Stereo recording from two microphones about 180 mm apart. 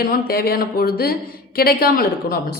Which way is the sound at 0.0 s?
55° left (ahead or behind).